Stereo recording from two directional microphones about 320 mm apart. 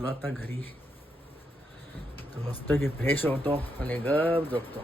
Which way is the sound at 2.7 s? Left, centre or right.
Centre.